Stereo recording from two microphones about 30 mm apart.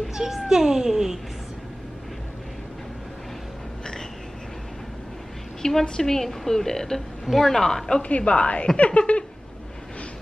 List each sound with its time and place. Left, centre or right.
0.1 s a child's voice: centre
5.6 s a woman's voice: centre
7.2 s a woman's voice: centre
7.5 s a woman's voice: centre
8.2 s speech: left